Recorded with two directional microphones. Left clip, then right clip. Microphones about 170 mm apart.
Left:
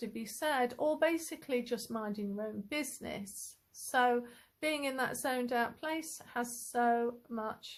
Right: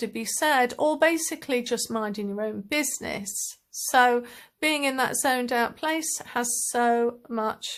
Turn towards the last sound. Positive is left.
turn(degrees=-30)  # may be behind; listen again after turning